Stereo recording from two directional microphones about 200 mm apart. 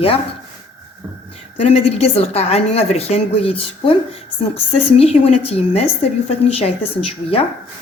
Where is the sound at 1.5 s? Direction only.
30° left (ahead or behind).